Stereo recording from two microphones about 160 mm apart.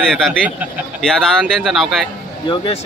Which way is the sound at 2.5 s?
30° left (ahead or behind).